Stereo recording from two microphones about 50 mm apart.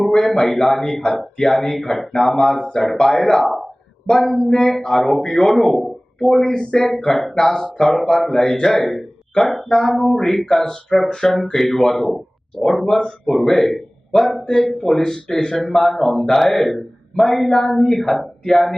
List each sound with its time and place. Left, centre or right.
0.0 s speech: centre
4.0 s a sound: centre
4.4 s speech: centre
12.8 s speech: centre